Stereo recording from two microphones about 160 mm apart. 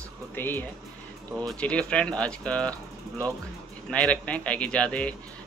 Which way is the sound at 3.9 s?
5° left (ahead or behind).